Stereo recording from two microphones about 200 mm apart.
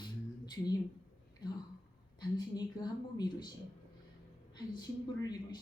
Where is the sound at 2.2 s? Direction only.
20° left (ahead or behind).